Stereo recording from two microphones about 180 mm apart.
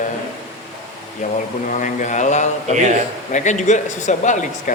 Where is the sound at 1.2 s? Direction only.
45° left (ahead or behind).